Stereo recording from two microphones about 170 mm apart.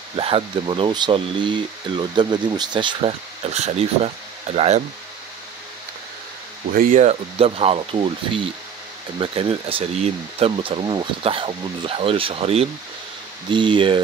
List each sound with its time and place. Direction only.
0.1 s speech: 30° right (ahead or behind)
6.7 s speech: 50° right (ahead or behind); by 14.0 s 30° right (ahead or behind)